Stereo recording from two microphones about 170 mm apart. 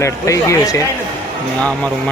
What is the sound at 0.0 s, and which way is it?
Speech, 20° left (ahead or behind).